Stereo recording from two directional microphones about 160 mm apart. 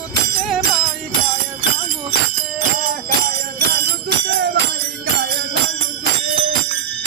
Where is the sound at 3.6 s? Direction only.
90° right.